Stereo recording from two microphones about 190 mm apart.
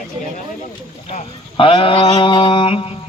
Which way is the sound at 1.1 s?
30° left (ahead or behind).